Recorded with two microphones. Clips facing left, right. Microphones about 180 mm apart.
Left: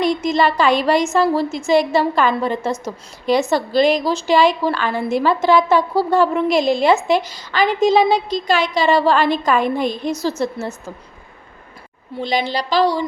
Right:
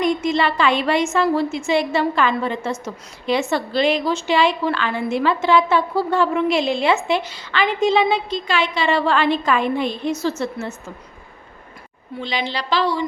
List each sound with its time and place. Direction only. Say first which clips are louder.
0.0 s a woman's voice: left 2 dB; 35° left (ahead or behind)
12.5 s a woman's voice: left 3 dB; 40° left (ahead or behind)